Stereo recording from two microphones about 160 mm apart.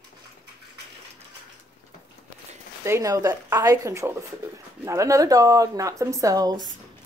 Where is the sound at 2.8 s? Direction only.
20° right (ahead or behind).